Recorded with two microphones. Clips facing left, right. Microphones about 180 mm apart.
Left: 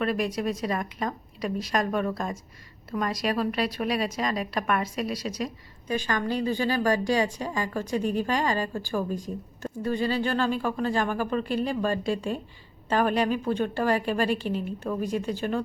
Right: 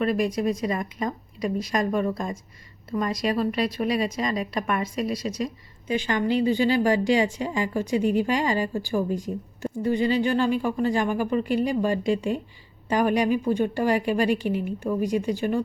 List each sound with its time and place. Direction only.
0.7 s speech: 10° right (ahead or behind)
3.1 s speech: 5° left (ahead or behind)
5.9 s speech: 20° right (ahead or behind)